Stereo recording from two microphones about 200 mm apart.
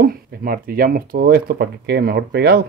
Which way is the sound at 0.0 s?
45° right (ahead or behind).